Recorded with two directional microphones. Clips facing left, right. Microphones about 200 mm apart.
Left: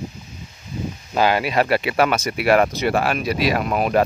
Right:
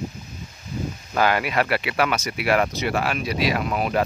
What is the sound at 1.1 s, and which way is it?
Speech, 25° left (ahead or behind).